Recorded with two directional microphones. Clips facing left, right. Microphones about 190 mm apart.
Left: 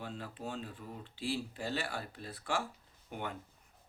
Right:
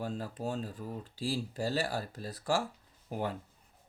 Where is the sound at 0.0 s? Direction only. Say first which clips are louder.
Right 6 dB; 40° right (ahead or behind).